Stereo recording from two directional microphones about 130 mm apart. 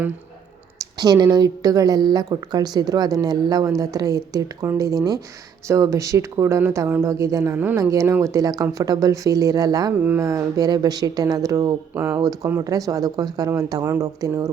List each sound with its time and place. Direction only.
0.8 s a woman's voice: 30° right (ahead or behind)
10.0 s speech: 15° right (ahead or behind)
10.2 s a woman's voice: 25° right (ahead or behind)